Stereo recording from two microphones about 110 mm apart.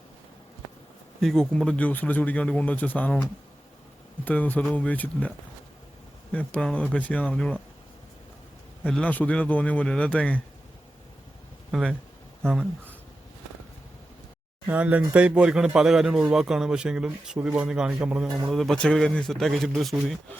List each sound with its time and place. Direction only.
1.2 s speech: 5° left (ahead or behind)
4.3 s speech: 15° left (ahead or behind)
6.3 s speech: 10° left (ahead or behind)
8.8 s speech: 10° left (ahead or behind)
11.7 s a man's voice: 5° left (ahead or behind)
14.7 s speech: 15° right (ahead or behind)
18.5 s a man's voice: centre (ahead or behind)